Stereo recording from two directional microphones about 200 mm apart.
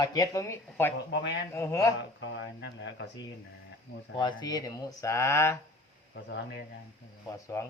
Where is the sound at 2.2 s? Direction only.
65° left (ahead or behind).